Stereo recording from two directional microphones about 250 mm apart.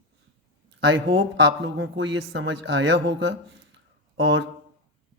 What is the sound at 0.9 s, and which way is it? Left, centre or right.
Speech, right.